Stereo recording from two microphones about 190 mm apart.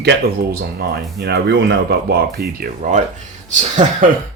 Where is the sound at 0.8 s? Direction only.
55° right (ahead or behind); by 4.1 s 40° right (ahead or behind).